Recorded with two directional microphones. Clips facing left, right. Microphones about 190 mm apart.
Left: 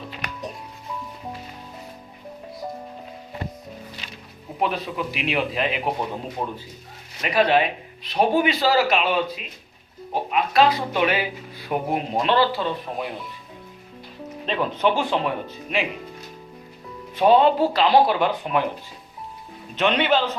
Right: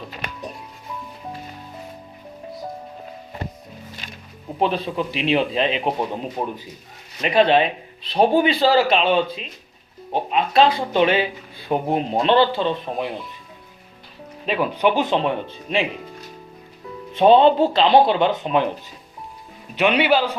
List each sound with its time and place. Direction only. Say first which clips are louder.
4.6 s a man's voice: right 3 dB; 30° right (ahead or behind)
14.4 s speech: right 2 dB; 10° right (ahead or behind); by 15.9 s 30° right (ahead or behind)
17.2 s speech: right 3 dB; 25° right (ahead or behind)
19.7 s a man's voice: right 3 dB; 10° right (ahead or behind)